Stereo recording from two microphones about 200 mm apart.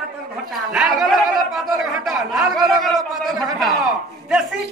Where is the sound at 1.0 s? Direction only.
Centre (ahead or behind).